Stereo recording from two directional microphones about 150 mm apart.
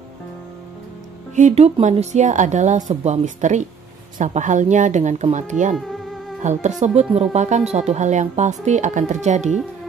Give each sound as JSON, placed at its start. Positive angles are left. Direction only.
{"t": 1.3, "sound": "speech", "side_deg": -50}